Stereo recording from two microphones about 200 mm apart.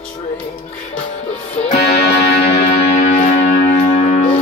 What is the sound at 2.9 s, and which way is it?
Music, 35° left (ahead or behind).